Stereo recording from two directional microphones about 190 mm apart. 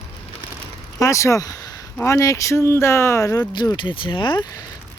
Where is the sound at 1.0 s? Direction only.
15° left (ahead or behind).